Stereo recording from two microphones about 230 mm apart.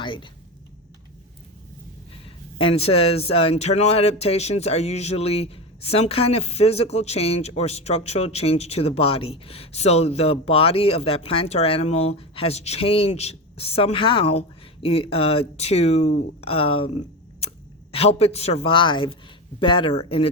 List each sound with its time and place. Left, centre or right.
0.0 s speech: left
2.6 s speech: left
17.9 s speech: left